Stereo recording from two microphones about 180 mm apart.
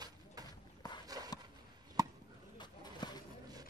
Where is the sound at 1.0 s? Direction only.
20° right (ahead or behind).